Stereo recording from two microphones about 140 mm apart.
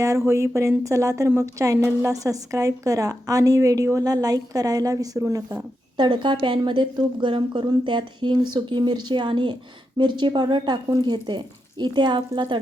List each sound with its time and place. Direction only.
0.0 s a woman's voice: 20° right (ahead or behind)